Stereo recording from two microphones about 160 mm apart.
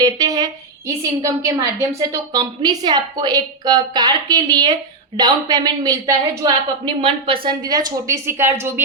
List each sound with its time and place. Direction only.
0.0 s a woman's voice: 25° right (ahead or behind)